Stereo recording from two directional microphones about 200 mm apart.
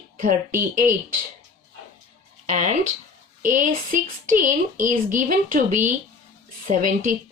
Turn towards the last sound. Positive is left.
turn(degrees=-40)  # may be behind; listen again after turning